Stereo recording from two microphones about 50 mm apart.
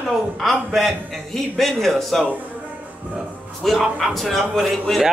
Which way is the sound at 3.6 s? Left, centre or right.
Centre.